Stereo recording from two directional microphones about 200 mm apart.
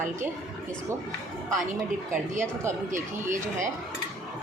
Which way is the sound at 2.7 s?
15° right (ahead or behind).